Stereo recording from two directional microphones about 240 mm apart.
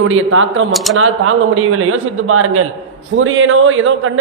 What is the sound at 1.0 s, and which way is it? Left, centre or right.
A man's voice, right.